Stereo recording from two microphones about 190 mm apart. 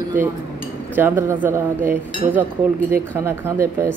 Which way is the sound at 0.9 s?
10° right (ahead or behind).